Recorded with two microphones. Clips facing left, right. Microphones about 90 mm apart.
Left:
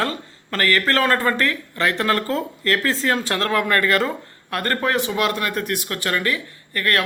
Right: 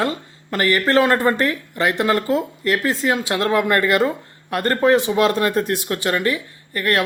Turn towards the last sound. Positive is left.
turn(degrees=-25)  # may be behind; listen again after turning